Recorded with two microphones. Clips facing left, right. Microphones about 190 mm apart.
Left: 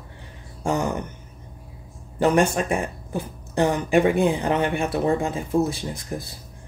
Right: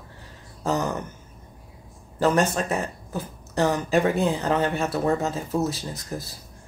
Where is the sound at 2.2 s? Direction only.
15° left (ahead or behind).